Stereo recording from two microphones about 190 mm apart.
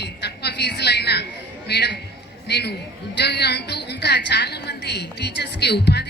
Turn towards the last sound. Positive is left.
turn(degrees=60)  # may be behind; listen again after turning